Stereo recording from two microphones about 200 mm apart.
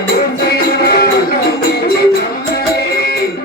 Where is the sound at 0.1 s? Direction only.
50° left (ahead or behind).